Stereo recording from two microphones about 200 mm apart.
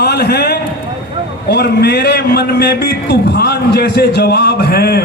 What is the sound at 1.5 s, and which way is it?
A man's voice, 55° left (ahead or behind).